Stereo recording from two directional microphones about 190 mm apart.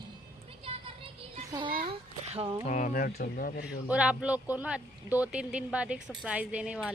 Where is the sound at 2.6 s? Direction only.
40° left (ahead or behind).